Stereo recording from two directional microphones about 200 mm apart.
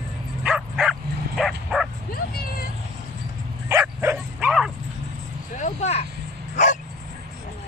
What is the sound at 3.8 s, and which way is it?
Bow-wow, 10° right (ahead or behind).